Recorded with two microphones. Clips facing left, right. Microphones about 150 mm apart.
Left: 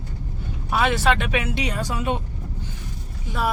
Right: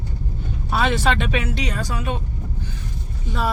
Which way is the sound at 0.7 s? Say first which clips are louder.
Even; 10° left (ahead or behind).